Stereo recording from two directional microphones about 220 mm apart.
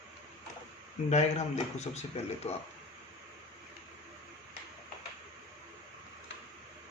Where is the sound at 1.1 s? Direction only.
30° left (ahead or behind).